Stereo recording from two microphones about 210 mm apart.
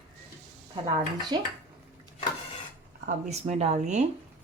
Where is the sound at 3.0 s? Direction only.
35° right (ahead or behind).